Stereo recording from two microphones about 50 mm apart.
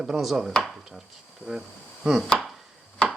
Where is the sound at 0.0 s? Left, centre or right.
Centre.